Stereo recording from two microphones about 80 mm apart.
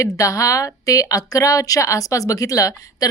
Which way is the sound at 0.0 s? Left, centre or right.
Left.